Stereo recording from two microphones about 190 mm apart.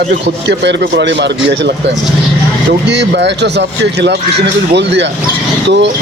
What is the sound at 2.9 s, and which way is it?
Speech, 65° right (ahead or behind).